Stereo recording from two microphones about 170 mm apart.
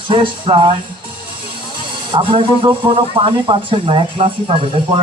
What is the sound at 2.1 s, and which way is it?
Speech, 30° right (ahead or behind).